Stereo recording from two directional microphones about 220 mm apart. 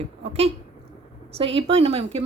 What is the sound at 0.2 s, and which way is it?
Speech, 30° right (ahead or behind).